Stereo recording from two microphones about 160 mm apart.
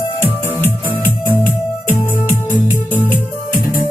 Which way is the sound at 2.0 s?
15° left (ahead or behind).